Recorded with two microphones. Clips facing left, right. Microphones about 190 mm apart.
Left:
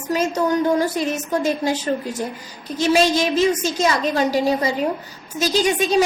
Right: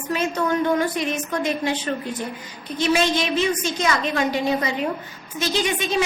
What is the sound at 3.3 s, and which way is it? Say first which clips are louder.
Speech: left 4 dB; 10° left (ahead or behind).